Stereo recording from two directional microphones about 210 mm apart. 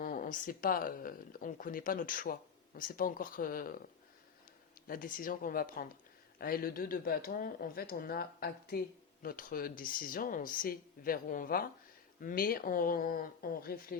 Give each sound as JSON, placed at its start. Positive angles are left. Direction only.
{"t": 0.0, "sound": "speech", "side_deg": 40}
{"t": 4.9, "sound": "speech", "side_deg": 40}